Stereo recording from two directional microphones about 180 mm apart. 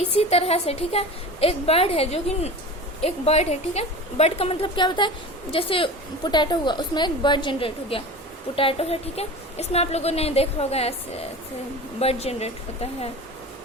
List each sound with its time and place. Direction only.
0.0 s a woman's voice: 35° left (ahead or behind)